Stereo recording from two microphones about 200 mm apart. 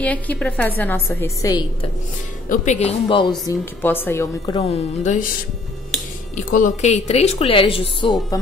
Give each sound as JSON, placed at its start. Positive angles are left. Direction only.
{"t": 0.0, "sound": "a woman's voice", "side_deg": 5}
{"t": 2.5, "sound": "speech", "side_deg": 35}
{"t": 3.8, "sound": "a woman's voice", "side_deg": 10}
{"t": 4.6, "sound": "speech", "side_deg": 30}
{"t": 6.3, "sound": "a woman's voice", "side_deg": 40}